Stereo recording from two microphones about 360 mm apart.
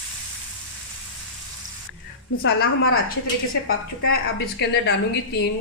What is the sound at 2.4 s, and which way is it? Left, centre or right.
Speech, left.